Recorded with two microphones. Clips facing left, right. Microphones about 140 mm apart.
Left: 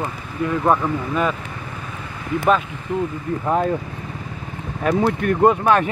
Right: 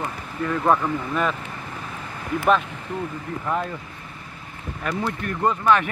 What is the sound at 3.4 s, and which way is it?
Speech, 40° left (ahead or behind).